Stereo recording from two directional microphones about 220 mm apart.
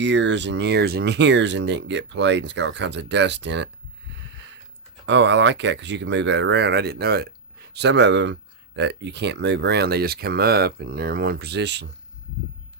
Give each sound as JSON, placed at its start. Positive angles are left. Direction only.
{"t": 0.0, "sound": "speech", "side_deg": -55}
{"t": 4.2, "sound": "a sound", "side_deg": -55}
{"t": 5.0, "sound": "speech", "side_deg": -55}